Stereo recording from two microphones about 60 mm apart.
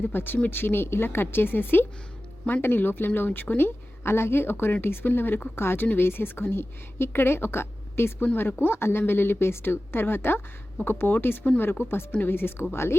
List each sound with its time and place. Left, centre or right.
0.0 s a woman's voice: left
4.0 s a woman's voice: left